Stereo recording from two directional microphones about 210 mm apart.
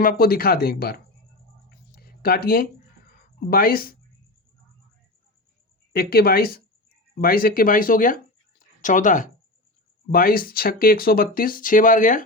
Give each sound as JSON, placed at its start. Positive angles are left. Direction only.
{"t": 0.0, "sound": "speech", "side_deg": 45}
{"t": 2.0, "sound": "a sound", "side_deg": 45}
{"t": 3.5, "sound": "speech", "side_deg": 45}
{"t": 5.9, "sound": "speech", "side_deg": 45}